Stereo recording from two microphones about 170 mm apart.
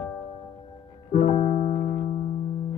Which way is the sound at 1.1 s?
40° left (ahead or behind).